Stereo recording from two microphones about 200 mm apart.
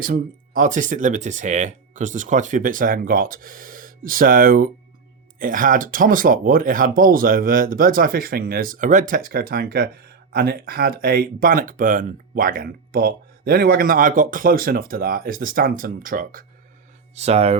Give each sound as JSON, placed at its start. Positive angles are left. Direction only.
{"t": 0.0, "sound": "speech", "side_deg": -45}
{"t": 17.2, "sound": "speech", "side_deg": -30}